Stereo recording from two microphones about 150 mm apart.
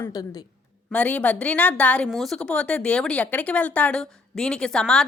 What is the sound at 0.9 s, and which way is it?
Speech, 10° left (ahead or behind).